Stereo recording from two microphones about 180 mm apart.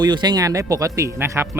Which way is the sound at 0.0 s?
25° right (ahead or behind).